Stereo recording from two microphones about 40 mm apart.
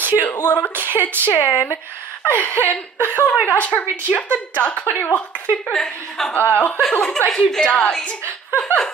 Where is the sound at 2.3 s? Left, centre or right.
Left.